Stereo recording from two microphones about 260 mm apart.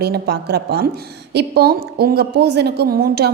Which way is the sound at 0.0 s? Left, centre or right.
Right.